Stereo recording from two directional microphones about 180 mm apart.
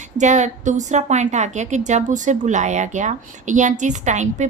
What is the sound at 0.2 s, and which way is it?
A woman's voice, 40° right (ahead or behind).